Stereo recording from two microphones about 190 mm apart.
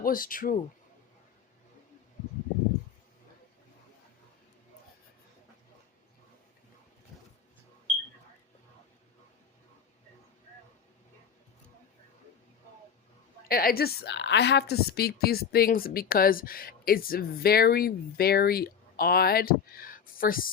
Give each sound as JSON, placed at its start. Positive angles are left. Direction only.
{"t": 0.0, "sound": "a woman's voice", "side_deg": 50}
{"t": 13.5, "sound": "a woman's voice", "side_deg": 50}